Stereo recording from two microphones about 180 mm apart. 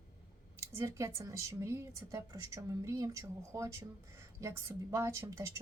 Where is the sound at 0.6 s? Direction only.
15° right (ahead or behind).